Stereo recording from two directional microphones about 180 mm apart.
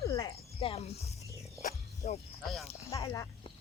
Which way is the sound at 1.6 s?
45° left (ahead or behind).